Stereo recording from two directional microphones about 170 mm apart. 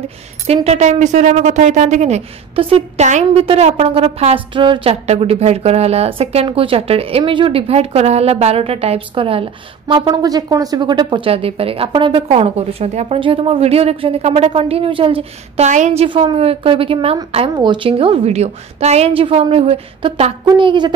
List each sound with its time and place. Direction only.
0.7 s a woman's voice: 45° right (ahead or behind); by 20.9 s 25° right (ahead or behind)